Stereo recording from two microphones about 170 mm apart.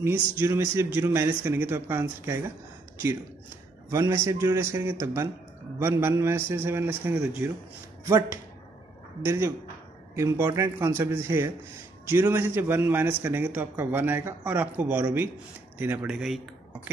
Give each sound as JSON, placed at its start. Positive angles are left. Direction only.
{"t": 0.4, "sound": "a man's voice", "side_deg": -15}
{"t": 3.9, "sound": "a man's voice", "side_deg": -15}
{"t": 9.2, "sound": "a man's voice", "side_deg": -15}